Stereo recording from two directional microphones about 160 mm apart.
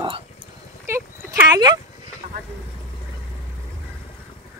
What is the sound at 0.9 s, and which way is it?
Speech, 15° right (ahead or behind).